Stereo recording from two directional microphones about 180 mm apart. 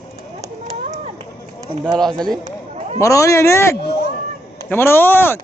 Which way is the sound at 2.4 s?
40° right (ahead or behind).